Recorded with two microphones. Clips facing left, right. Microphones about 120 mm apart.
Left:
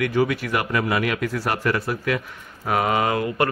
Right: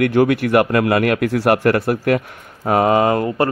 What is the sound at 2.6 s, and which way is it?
Speech, 35° right (ahead or behind).